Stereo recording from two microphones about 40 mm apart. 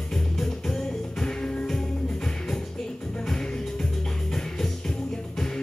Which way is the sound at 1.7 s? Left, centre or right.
Centre.